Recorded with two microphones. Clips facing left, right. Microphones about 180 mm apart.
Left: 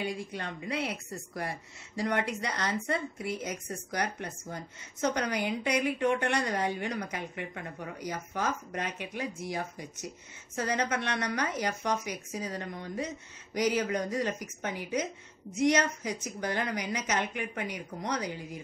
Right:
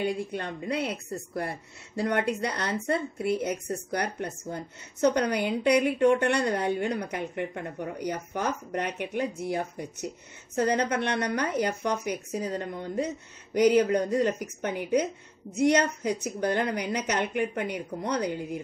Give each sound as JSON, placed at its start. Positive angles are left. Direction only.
{"t": 0.0, "sound": "a woman's voice", "side_deg": -60}
{"t": 2.0, "sound": "a woman's voice", "side_deg": -60}